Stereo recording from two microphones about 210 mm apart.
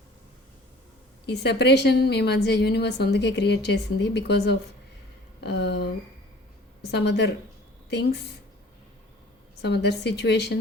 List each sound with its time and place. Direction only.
1.3 s a woman's voice: 50° left (ahead or behind)
9.6 s a woman's voice: 55° left (ahead or behind)